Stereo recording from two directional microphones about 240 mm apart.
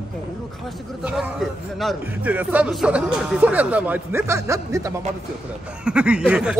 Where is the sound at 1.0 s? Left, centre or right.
Centre.